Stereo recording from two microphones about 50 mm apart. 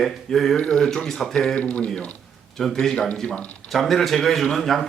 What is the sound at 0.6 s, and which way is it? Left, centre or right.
Speech, centre.